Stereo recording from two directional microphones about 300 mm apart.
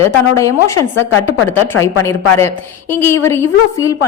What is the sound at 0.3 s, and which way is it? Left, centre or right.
Speech, centre.